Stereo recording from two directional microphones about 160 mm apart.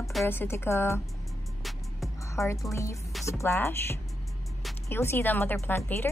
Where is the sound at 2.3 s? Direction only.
20° left (ahead or behind).